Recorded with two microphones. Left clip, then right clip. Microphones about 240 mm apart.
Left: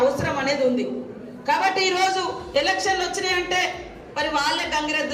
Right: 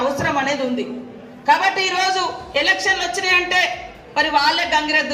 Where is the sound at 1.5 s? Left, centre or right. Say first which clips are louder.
Right 4 dB; right.